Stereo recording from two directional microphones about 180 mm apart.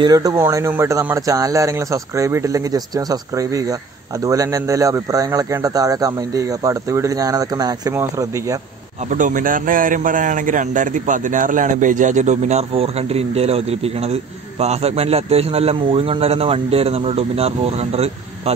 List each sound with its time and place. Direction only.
0.0 s speech: 20° right (ahead or behind)
9.1 s a man's voice: 45° right (ahead or behind)